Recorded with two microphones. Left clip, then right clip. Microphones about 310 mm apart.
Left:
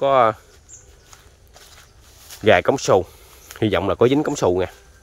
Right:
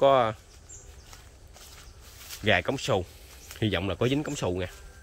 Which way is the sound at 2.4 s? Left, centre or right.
Centre.